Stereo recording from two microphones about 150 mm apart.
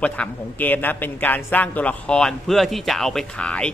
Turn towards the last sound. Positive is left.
turn(degrees=5)  # may be behind; listen again after turning